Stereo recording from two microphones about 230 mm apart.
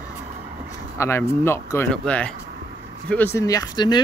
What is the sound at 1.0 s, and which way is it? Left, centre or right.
Speech, centre.